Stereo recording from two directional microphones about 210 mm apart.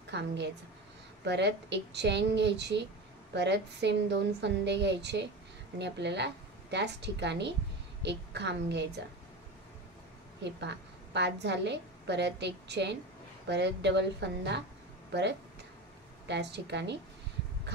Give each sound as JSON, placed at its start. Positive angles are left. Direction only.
{"t": 0.1, "sound": "a woman's voice", "side_deg": -55}
{"t": 10.4, "sound": "a woman's voice", "side_deg": -55}
{"t": 16.3, "sound": "a woman's voice", "side_deg": -55}